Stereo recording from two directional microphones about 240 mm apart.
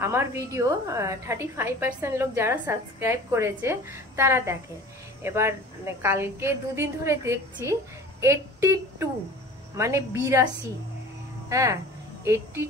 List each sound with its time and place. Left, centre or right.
0.0 s a woman's voice: centre